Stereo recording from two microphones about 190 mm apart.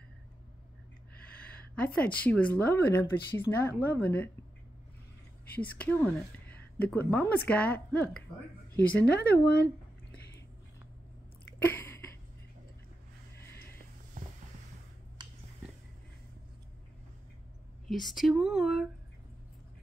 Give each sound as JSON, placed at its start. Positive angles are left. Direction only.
{"t": 1.8, "sound": "speech", "side_deg": 5}
{"t": 5.6, "sound": "speech", "side_deg": 10}
{"t": 9.0, "sound": "speech", "side_deg": 55}
{"t": 11.6, "sound": "a sound", "side_deg": 10}
{"t": 14.2, "sound": "a sound", "side_deg": -45}
{"t": 18.0, "sound": "speech", "side_deg": 0}